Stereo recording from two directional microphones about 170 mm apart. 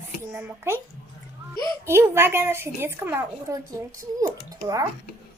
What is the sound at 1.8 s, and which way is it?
A woman's voice, 15° right (ahead or behind).